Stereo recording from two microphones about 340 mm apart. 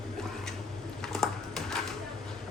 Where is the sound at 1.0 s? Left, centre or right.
Centre.